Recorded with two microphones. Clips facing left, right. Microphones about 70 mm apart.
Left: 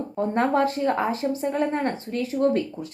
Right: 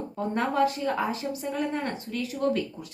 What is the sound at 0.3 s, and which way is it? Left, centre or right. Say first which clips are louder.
A woman's voice: left 3 dB; left.